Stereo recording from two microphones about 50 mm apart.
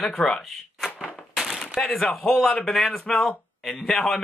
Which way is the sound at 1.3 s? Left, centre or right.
Centre.